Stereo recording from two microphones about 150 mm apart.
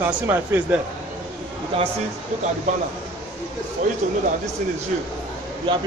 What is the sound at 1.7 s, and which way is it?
Speech, 35° right (ahead or behind).